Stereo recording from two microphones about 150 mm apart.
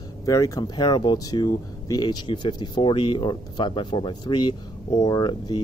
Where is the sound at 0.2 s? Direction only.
20° left (ahead or behind).